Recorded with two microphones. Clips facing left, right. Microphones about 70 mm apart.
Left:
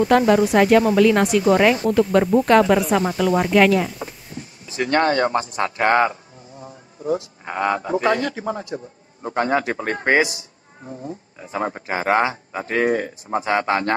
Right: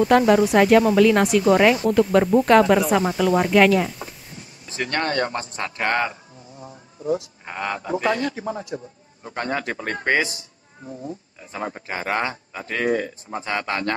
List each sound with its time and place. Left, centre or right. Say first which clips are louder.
0.0 s speech: even; centre
5.1 s speech: left 5 dB; left
5.4 s a man's voice: left 6 dB; left
8.7 s a man's voice: left 1 dB; left
11.3 s a man's voice: left 7 dB; left
13.4 s a man's voice: left 5 dB; left